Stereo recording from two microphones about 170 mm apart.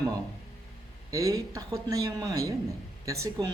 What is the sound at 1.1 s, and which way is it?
Speech, 20° right (ahead or behind).